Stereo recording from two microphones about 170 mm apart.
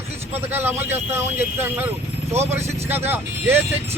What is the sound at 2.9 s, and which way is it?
Speech, 10° right (ahead or behind).